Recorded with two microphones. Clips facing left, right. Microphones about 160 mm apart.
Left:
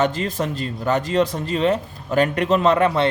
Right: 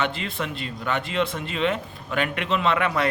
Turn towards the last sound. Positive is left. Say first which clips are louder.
# left 6 dB
turn(degrees=30)  # may be behind; listen again after turning